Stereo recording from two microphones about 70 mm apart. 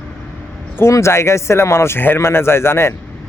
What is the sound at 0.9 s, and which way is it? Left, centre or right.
Speech, left.